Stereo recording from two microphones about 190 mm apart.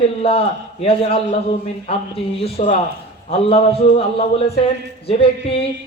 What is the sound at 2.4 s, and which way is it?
A man's voice, 35° left (ahead or behind).